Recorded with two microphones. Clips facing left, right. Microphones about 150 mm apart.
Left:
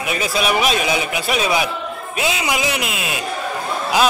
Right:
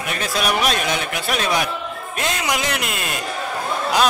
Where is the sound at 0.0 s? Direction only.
5° left (ahead or behind).